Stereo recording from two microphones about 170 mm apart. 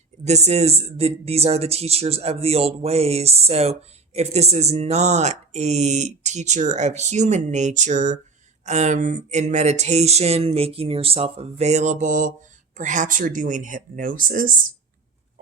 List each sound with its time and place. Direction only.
0.3 s speech: 40° right (ahead or behind)